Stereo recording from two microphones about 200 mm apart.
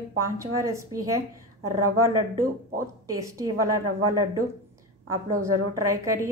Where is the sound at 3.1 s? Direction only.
15° right (ahead or behind).